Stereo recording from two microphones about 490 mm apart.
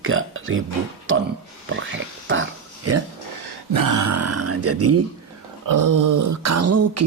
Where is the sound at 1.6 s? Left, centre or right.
Right.